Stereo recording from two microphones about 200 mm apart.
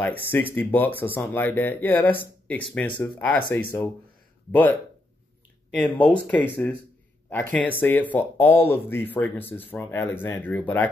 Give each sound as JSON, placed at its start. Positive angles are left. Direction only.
{"t": 0.6, "sound": "speech", "side_deg": 10}